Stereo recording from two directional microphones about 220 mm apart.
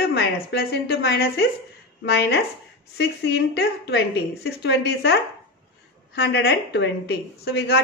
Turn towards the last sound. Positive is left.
turn(degrees=50)  # may be behind; listen again after turning